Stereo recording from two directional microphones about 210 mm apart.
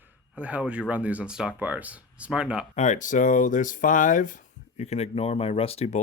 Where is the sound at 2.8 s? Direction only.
35° left (ahead or behind).